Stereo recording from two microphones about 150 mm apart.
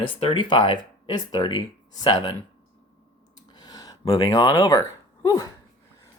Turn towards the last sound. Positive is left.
turn(degrees=20)  # may be behind; listen again after turning